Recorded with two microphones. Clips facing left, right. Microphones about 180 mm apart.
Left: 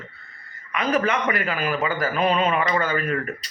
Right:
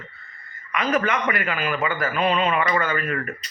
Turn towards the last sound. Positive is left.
turn(degrees=35)  # may be behind; listen again after turning